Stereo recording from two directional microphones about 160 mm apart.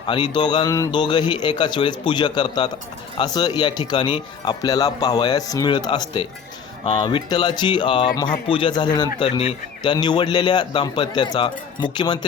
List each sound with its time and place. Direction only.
0.0 s speech: 30° left (ahead or behind)